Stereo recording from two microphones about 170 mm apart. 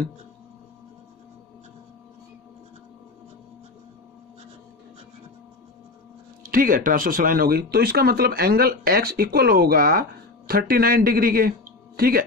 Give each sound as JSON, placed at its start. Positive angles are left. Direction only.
{"t": 6.4, "sound": "speech", "side_deg": -55}